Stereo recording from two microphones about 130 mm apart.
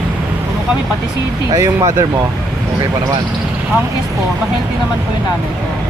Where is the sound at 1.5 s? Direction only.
25° right (ahead or behind).